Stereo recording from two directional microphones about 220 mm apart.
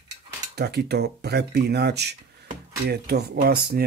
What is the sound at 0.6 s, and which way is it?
Speech, 50° right (ahead or behind).